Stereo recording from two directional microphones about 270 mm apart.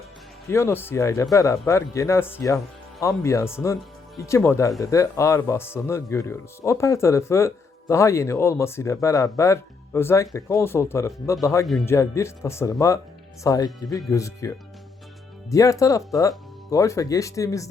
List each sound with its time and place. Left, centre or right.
0.4 s speech: centre